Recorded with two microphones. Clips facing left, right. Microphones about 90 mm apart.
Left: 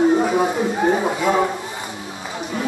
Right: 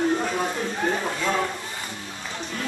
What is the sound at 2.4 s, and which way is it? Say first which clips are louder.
Run: left 7 dB; 15° left (ahead or behind).